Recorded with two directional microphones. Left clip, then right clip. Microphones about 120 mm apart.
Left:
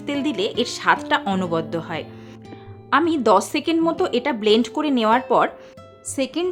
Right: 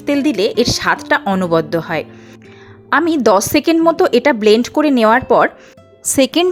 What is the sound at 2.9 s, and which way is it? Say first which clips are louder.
A woman's voice: right 5 dB; 50° right (ahead or behind).